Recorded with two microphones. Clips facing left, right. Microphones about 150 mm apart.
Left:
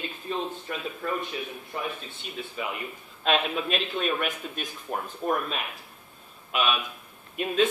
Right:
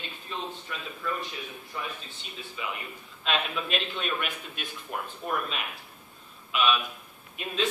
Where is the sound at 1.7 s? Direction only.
55° left (ahead or behind); by 5.0 s 40° left (ahead or behind).